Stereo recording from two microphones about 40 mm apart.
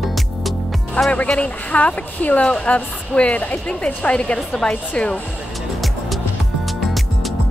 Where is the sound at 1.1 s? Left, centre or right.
Left.